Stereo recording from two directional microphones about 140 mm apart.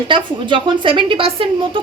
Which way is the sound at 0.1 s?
35° right (ahead or behind).